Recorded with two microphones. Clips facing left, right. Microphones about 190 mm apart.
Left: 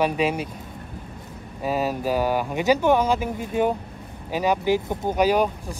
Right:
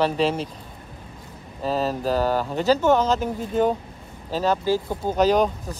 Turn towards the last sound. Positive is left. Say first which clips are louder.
# right 1 dB
turn(degrees=10)  # may be behind; listen again after turning